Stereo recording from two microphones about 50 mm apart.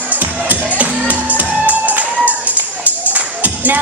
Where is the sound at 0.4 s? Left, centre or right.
Right.